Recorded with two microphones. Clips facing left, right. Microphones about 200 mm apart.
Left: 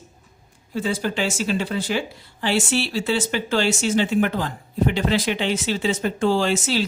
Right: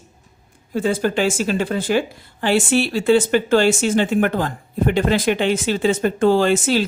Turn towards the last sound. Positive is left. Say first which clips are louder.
# right 5 dB
turn(degrees=-55)  # may be behind; listen again after turning